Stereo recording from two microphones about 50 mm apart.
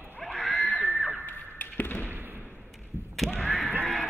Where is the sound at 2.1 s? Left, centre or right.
Right.